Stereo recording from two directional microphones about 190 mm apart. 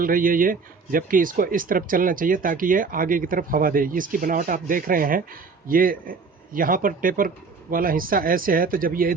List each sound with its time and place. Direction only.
0.0 s speech: 45° right (ahead or behind)